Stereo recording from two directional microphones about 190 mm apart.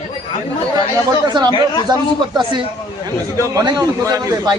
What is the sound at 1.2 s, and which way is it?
A man's voice, 25° right (ahead or behind).